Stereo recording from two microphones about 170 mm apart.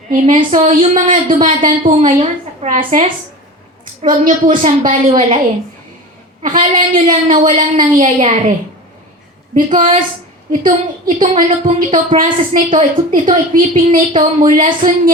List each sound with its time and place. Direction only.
0.5 s a woman's voice: 45° right (ahead or behind)
6.4 s a woman's voice: 50° right (ahead or behind)
9.6 s a woman's voice: 35° right (ahead or behind)
10.6 s a woman's voice: 55° right (ahead or behind)